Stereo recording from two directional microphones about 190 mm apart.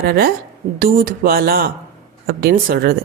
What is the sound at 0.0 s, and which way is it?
A woman's voice, 55° right (ahead or behind).